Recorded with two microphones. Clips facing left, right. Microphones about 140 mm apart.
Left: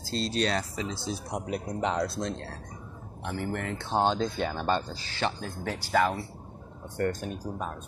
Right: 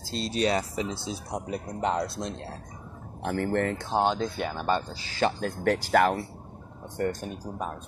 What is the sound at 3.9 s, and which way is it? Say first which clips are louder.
Speech: even; 10° right (ahead or behind).